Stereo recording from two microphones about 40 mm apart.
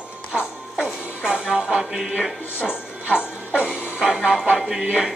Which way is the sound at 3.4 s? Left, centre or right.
Left.